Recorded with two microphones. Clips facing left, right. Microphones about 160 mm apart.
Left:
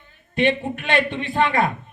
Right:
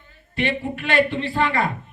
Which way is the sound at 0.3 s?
20° left (ahead or behind).